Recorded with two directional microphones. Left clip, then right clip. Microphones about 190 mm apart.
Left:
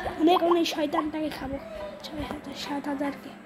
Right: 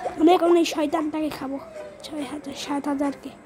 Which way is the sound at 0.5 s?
55° right (ahead or behind).